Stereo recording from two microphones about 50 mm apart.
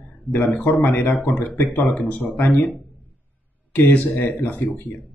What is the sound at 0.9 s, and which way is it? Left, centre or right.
Speech, left.